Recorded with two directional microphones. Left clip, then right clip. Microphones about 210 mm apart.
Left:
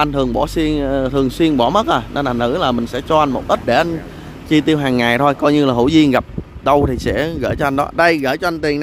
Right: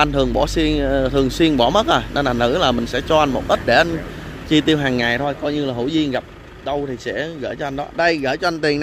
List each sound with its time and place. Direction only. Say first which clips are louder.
0.0 s speech: even; 10° left (ahead or behind)
5.2 s speech: left 8 dB; 30° left (ahead or behind); by 8.7 s 10° left (ahead or behind)